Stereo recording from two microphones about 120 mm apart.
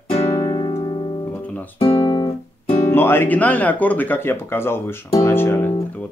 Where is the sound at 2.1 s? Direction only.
35° left (ahead or behind).